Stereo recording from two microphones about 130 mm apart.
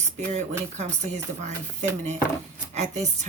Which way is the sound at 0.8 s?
60° right (ahead or behind).